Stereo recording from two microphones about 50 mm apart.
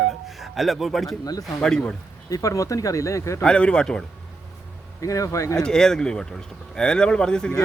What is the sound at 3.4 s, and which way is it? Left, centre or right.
Speech, centre.